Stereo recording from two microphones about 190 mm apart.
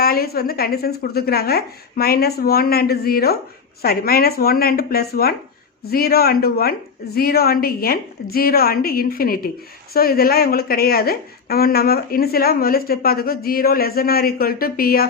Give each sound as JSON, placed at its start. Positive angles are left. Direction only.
{"t": 0.0, "sound": "a woman's voice", "side_deg": 55}